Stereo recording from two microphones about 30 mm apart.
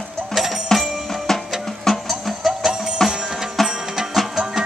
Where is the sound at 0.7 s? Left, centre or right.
Centre.